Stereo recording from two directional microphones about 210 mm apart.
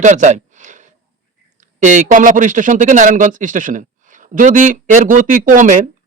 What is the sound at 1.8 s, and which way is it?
Speech, 35° right (ahead or behind).